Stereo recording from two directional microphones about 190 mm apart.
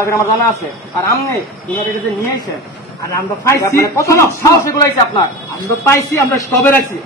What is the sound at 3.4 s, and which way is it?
A man's voice, 15° left (ahead or behind).